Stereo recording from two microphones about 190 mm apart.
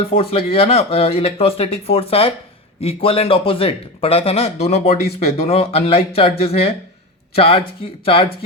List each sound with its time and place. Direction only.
0.1 s a man's voice: 30° left (ahead or behind)